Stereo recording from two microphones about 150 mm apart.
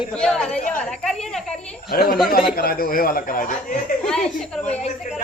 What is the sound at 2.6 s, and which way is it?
Speech, 75° left (ahead or behind).